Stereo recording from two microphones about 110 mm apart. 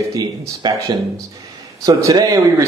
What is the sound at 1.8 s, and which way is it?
Speech, 30° right (ahead or behind).